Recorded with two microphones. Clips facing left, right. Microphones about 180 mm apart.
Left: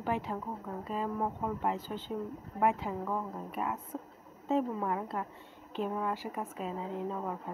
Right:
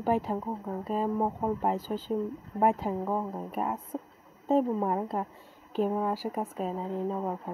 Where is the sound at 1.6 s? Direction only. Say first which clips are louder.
Right 5 dB; 40° right (ahead or behind).